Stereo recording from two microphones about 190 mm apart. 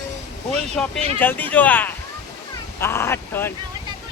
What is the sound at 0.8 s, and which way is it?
Speech, 5° left (ahead or behind).